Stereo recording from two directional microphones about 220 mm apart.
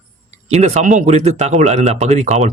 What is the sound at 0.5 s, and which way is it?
Speech, 30° right (ahead or behind).